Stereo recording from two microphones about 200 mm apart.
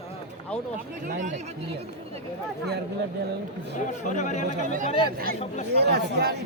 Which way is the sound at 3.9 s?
35° left (ahead or behind).